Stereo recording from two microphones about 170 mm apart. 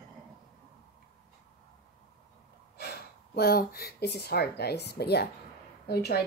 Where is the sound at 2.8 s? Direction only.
65° left (ahead or behind).